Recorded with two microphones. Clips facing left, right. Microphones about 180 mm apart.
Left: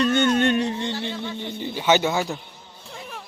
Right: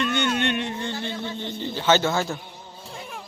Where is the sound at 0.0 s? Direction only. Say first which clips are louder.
Left 5 dB; 45° left (ahead or behind).